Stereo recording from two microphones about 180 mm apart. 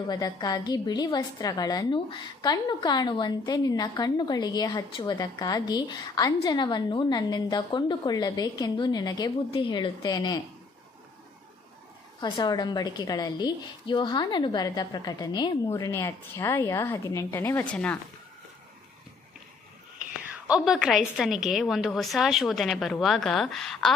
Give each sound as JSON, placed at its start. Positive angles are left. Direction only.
{"t": 0.1, "sound": "a woman's voice", "side_deg": 20}
{"t": 12.2, "sound": "a woman's voice", "side_deg": 25}
{"t": 20.4, "sound": "a woman's voice", "side_deg": -5}